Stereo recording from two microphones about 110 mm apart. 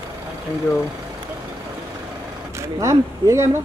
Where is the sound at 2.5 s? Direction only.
25° right (ahead or behind).